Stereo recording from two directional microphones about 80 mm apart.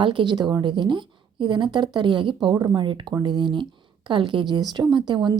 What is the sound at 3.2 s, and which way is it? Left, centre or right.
A woman's voice, right.